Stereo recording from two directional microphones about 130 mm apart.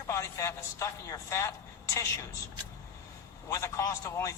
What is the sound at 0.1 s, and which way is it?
A man's voice, 20° left (ahead or behind).